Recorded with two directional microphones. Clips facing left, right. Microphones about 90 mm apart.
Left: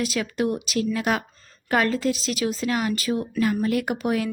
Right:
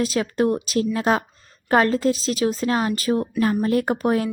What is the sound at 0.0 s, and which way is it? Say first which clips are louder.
A woman's voice: right 4 dB; 35° right (ahead or behind).